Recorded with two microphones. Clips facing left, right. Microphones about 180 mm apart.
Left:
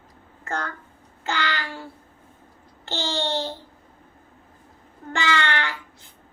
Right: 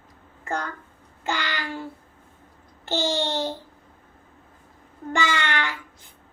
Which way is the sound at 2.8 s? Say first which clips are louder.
Right 3 dB; 15° right (ahead or behind).